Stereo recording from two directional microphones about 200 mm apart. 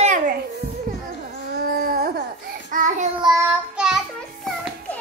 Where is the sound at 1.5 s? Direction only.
45° right (ahead or behind).